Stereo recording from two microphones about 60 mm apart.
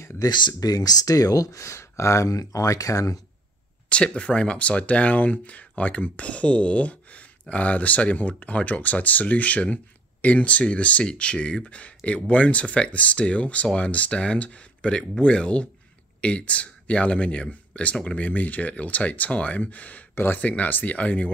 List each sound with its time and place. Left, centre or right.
0.2 s speech: left
1.6 s speech: left
3.9 s speech: centre